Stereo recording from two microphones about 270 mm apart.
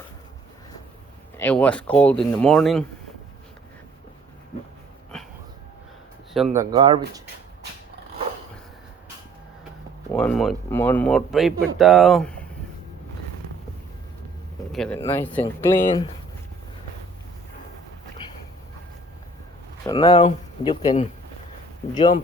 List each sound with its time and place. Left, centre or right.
1.4 s speech: centre
5.1 s a sound: centre
6.3 s speech: centre
10.1 s speech: centre
14.7 s speech: centre
19.8 s speech: centre